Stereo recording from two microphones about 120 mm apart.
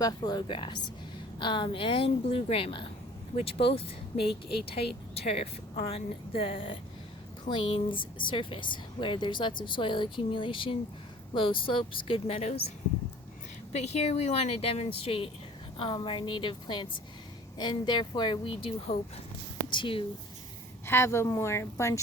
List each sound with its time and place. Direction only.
0.0 s speech: 35° left (ahead or behind); by 12.5 s 55° left (ahead or behind)
13.7 s a woman's voice: 65° left (ahead or behind); by 18.3 s 40° left (ahead or behind)
18.5 s a woman's voice: 55° left (ahead or behind)
19.7 s speech: 45° left (ahead or behind)
20.8 s speech: 20° left (ahead or behind)